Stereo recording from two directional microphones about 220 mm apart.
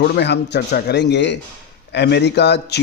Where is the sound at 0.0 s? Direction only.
50° left (ahead or behind).